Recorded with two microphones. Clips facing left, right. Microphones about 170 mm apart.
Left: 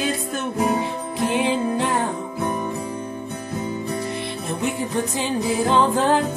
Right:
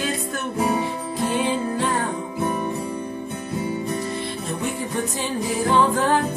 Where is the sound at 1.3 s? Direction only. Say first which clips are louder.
Left 3 dB; 20° left (ahead or behind).